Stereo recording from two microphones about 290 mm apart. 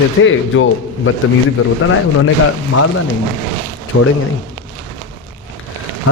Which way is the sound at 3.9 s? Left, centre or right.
Left.